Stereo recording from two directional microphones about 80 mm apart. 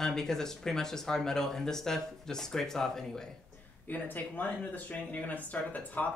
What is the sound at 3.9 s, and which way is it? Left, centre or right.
Speech, left.